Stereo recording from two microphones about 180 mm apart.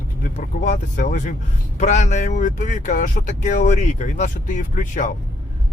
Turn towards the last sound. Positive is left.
turn(degrees=45)  # may be behind; listen again after turning